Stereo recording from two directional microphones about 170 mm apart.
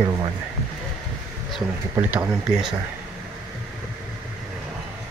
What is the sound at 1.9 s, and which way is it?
Speech, 20° right (ahead or behind).